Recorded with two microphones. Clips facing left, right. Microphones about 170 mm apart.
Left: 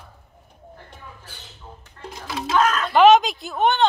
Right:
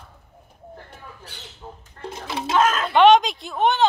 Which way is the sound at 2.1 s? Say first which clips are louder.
Even; 25° right (ahead or behind).